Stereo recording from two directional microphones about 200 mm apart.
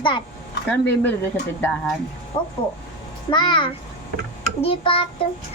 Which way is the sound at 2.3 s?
25° left (ahead or behind).